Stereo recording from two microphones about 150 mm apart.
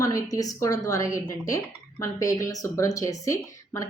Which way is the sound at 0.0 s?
20° left (ahead or behind).